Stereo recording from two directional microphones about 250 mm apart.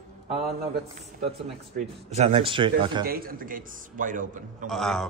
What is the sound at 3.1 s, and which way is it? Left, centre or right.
A man's voice, right.